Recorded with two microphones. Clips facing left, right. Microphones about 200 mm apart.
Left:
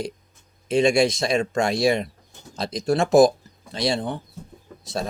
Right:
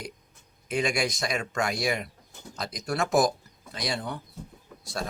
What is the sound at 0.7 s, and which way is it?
Speech, 25° left (ahead or behind).